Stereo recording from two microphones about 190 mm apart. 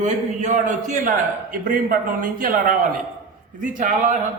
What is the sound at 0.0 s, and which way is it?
A man's voice, 40° right (ahead or behind).